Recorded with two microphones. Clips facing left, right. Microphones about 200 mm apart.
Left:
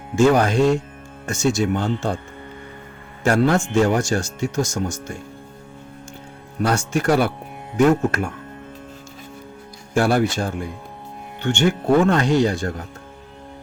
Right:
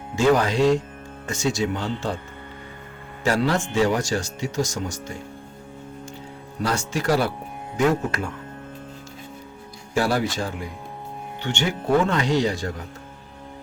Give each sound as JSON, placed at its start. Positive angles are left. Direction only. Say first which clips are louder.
{"t": 0.2, "sound": "speech", "louder": "left 3 dB", "side_deg": 50}
{"t": 3.2, "sound": "speech", "louder": "left 4 dB", "side_deg": 50}
{"t": 6.6, "sound": "speech", "louder": "left 5 dB", "side_deg": 50}
{"t": 10.0, "sound": "speech", "louder": "left 4 dB", "side_deg": 50}